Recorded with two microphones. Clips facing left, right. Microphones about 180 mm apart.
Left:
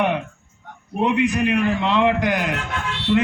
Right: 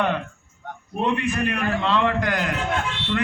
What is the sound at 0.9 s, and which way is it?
A man's voice, 15° left (ahead or behind).